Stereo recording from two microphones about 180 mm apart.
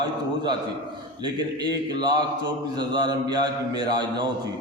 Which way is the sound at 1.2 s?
25° right (ahead or behind).